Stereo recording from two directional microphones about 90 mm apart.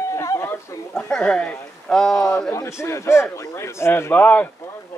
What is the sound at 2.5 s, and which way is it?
Speech, 30° left (ahead or behind).